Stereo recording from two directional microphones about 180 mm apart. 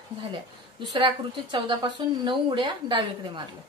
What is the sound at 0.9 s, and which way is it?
A woman's voice, 25° right (ahead or behind).